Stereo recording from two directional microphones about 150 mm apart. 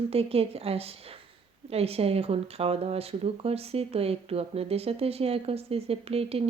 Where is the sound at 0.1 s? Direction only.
40° right (ahead or behind).